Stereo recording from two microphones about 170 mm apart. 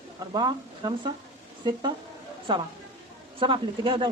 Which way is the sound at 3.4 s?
30° right (ahead or behind).